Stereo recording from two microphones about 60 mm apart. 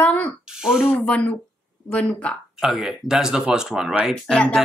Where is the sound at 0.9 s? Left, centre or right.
Left.